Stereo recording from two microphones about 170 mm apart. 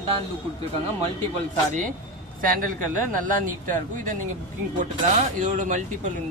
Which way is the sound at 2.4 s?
55° right (ahead or behind).